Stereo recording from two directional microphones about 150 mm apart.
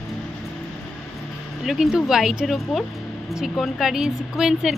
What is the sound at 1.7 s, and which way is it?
A woman's voice, centre (ahead or behind).